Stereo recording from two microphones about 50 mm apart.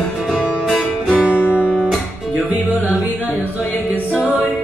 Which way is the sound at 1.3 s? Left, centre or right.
Left.